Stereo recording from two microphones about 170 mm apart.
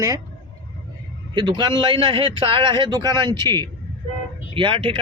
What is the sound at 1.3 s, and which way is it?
A man's voice, 25° right (ahead or behind).